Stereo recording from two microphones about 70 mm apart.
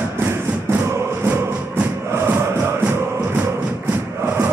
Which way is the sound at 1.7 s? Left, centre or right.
Right.